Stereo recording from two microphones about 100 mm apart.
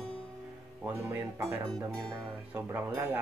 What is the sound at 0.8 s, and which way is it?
Speech, 25° right (ahead or behind).